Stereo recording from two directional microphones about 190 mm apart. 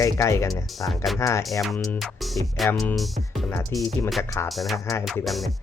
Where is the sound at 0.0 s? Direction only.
15° left (ahead or behind).